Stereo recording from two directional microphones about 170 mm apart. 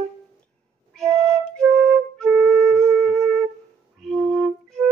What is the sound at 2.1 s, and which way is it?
Flute, 5° left (ahead or behind).